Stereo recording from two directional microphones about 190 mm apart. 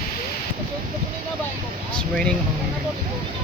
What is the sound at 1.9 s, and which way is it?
Speech, 5° left (ahead or behind).